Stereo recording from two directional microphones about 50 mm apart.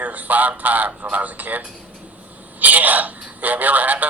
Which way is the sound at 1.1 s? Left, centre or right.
Right.